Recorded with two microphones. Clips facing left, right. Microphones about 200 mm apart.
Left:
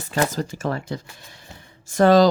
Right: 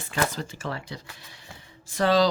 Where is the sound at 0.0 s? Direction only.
40° left (ahead or behind).